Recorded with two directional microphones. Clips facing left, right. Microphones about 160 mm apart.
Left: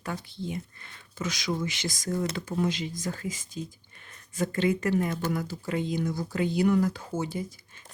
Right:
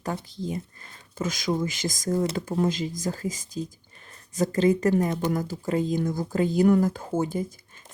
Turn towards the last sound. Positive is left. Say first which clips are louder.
# right 5 dB
turn(degrees=-45)  # may be behind; listen again after turning